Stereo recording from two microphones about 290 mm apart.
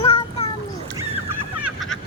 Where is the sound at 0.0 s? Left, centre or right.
Centre.